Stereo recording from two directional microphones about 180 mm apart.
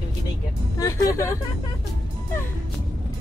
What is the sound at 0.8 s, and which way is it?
Speech, 15° left (ahead or behind).